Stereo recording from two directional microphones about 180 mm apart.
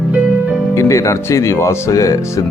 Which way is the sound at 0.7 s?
15° left (ahead or behind).